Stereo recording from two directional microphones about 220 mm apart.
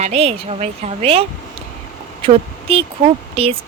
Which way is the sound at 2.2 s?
25° right (ahead or behind).